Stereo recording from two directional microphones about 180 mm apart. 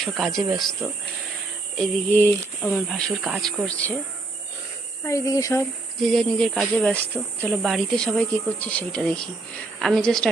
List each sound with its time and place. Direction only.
0.0 s speech: centre (ahead or behind)
2.1 s speech: 10° left (ahead or behind)
2.7 s speech: centre (ahead or behind)
5.0 s speech: 15° left (ahead or behind)
6.0 s speech: centre (ahead or behind)